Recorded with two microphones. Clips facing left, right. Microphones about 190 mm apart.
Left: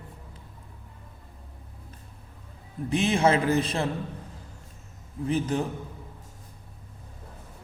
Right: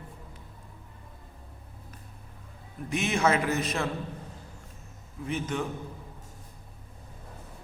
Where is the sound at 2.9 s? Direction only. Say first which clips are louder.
Left 3 dB; 30° left (ahead or behind).